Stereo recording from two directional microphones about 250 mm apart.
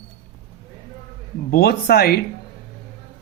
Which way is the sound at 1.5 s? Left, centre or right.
Left.